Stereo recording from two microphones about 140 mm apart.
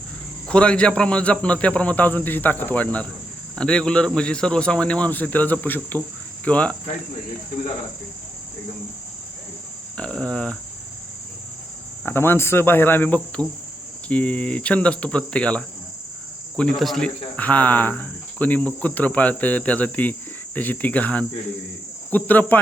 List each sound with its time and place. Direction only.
0.4 s speech: 5° left (ahead or behind)
6.4 s cricket: 10° left (ahead or behind)
10.0 s speech: 10° left (ahead or behind)
12.0 s speech: 15° left (ahead or behind)